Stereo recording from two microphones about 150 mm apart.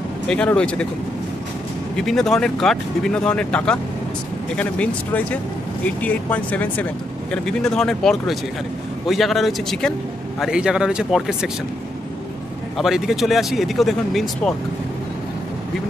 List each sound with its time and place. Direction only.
0.3 s speech: 5° left (ahead or behind)
2.0 s speech: 5° left (ahead or behind)
12.7 s speech: centre (ahead or behind)